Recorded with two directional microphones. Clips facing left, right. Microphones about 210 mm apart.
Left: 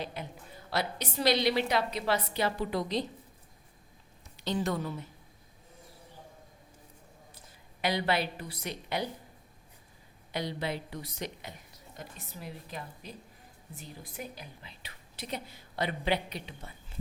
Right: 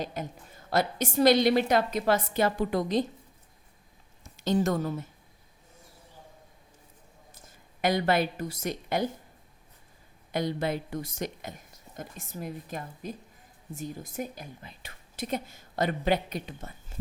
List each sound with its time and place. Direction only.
0.0 s a woman's voice: 45° right (ahead or behind)
4.2 s a woman's voice: 45° right (ahead or behind)
7.3 s a woman's voice: 45° right (ahead or behind)
10.3 s a woman's voice: 50° right (ahead or behind)